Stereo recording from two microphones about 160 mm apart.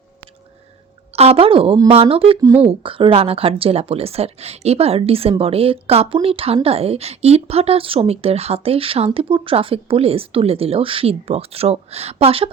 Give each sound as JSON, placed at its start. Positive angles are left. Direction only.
{"t": 1.1, "sound": "a woman's voice", "side_deg": -40}